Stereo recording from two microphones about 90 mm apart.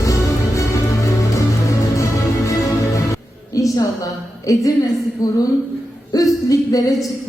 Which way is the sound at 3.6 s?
35° left (ahead or behind).